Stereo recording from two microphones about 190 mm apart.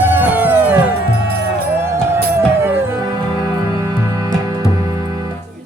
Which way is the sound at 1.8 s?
15° right (ahead or behind).